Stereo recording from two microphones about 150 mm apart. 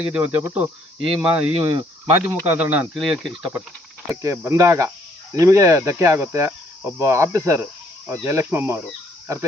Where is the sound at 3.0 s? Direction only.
Centre (ahead or behind).